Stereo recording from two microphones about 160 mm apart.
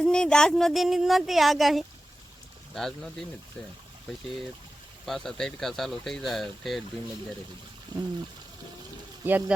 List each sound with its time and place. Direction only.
0.0 s speech: 5° left (ahead or behind)
5.0 s speech: centre (ahead or behind)
9.2 s speech: 10° right (ahead or behind)